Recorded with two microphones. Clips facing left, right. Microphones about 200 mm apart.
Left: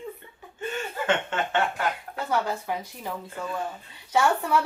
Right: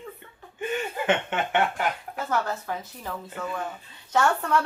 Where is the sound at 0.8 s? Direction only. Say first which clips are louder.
Even; 15° right (ahead or behind).